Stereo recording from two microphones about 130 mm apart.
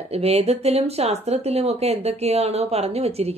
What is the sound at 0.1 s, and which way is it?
Speech, 55° right (ahead or behind).